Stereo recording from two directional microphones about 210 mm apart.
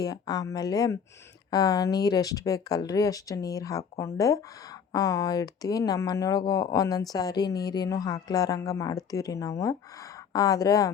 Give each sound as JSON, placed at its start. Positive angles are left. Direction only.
{"t": 0.0, "sound": "speech", "side_deg": 20}